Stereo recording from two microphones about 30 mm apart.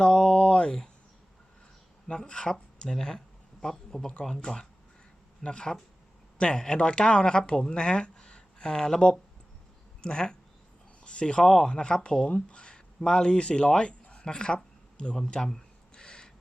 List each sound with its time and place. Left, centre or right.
0.0 s a sound: left
2.0 s a woman's voice: left
2.9 s speech: centre
5.4 s a woman's voice: left
10.0 s speech: left
11.4 s speech: centre
11.7 s a woman's voice: left
13.0 s speech: left
14.0 s a sound: left
15.3 s speech: left
16.0 s a sound: left